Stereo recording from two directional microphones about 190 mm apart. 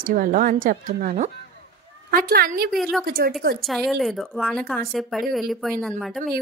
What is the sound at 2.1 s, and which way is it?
Speech, 50° right (ahead or behind).